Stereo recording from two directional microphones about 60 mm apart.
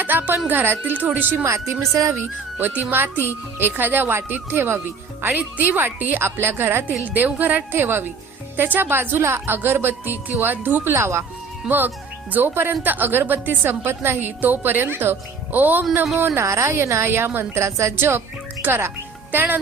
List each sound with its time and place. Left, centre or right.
0.0 s a woman's voice: right
1.5 s speech: right
2.1 s a woman's voice: right
7.0 s a woman's voice: right
7.8 s a woman's voice: right
12.3 s a woman's voice: right
17.1 s a woman's voice: right
18.6 s speech: right
19.3 s speech: right